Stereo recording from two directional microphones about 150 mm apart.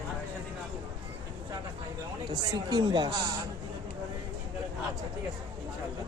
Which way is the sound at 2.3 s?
30° right (ahead or behind).